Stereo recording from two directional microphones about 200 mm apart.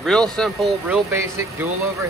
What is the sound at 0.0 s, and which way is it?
Speech, centre (ahead or behind).